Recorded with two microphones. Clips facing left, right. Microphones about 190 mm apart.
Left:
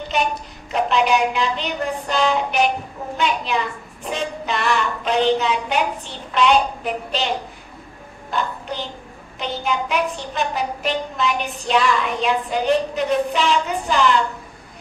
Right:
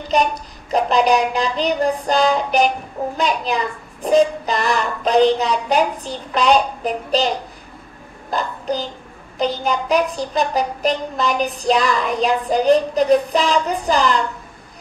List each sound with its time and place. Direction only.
0.7 s child singing: 35° right (ahead or behind)
8.3 s a child's voice: 40° right (ahead or behind)
9.4 s child singing: 40° right (ahead or behind)